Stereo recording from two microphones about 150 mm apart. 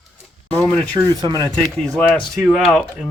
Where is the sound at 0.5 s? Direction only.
10° left (ahead or behind).